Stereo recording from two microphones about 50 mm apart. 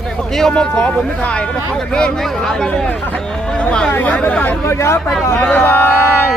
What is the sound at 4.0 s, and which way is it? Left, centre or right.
Speech, left.